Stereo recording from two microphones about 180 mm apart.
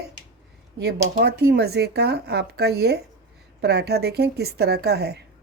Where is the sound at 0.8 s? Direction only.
65° right (ahead or behind).